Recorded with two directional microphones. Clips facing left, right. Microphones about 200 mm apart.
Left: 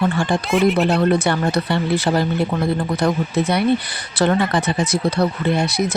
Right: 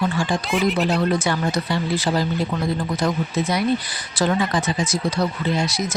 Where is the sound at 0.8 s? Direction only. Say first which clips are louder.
Left 4 dB; 55° left (ahead or behind).